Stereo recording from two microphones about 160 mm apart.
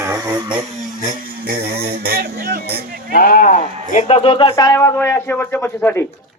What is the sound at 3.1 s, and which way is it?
Sheep, 65° left (ahead or behind).